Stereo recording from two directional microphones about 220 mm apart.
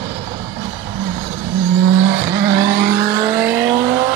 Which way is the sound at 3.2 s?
10° right (ahead or behind).